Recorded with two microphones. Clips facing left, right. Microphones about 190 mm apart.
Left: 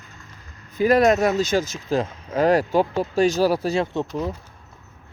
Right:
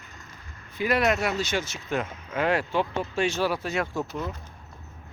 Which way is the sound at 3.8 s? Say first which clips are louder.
Left 5 dB; 25° left (ahead or behind).